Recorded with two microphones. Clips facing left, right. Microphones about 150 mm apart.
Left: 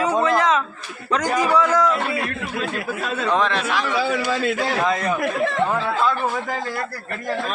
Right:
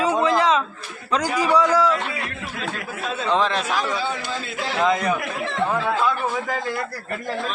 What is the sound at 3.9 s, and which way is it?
Speech, 80° left.